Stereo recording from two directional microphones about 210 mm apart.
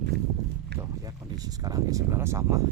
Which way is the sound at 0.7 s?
55° right (ahead or behind).